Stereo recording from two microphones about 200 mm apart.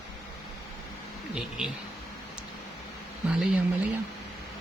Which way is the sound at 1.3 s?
5° right (ahead or behind).